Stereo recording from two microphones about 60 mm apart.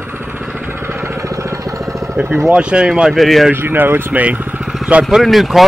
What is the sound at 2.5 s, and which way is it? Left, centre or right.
Speech, centre.